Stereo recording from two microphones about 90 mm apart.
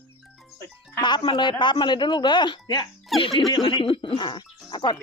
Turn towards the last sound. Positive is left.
turn(degrees=60)  # may be behind; listen again after turning